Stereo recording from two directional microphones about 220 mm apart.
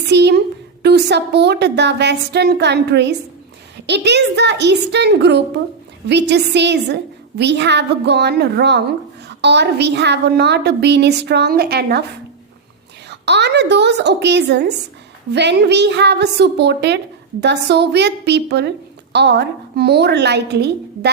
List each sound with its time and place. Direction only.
0.1 s a woman's voice: 50° right (ahead or behind)
13.1 s a woman's voice: 50° right (ahead or behind)